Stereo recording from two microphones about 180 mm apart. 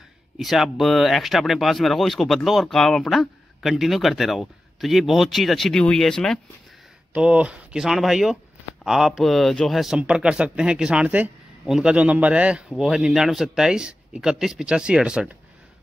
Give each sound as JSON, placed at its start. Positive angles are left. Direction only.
{"t": 0.4, "sound": "a man's voice", "side_deg": 0}